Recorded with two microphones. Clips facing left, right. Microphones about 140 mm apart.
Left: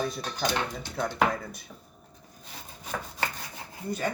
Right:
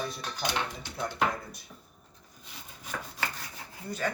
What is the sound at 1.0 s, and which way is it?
Speech, 65° left (ahead or behind).